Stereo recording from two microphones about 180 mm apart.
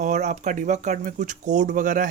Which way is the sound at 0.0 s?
40° right (ahead or behind).